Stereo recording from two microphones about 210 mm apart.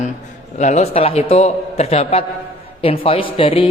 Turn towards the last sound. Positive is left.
turn(degrees=25)  # may be behind; listen again after turning